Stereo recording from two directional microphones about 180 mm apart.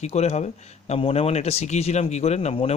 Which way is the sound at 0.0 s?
35° left (ahead or behind).